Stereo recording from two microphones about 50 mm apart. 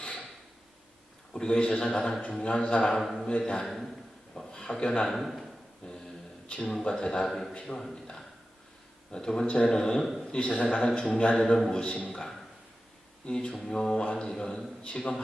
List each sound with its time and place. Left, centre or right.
0.0 s a sound: left
1.3 s a man's voice: centre
3.0 s a man's voice: centre
3.2 s a man's voice: centre
5.0 s a man's voice: centre
5.8 s a sound: left
6.7 s speech: centre
7.3 s a man's voice: centre
7.5 s speech: centre
9.1 s speech: centre
10.0 s a man's voice: centre
10.3 s a man's voice: left
12.1 s speech: centre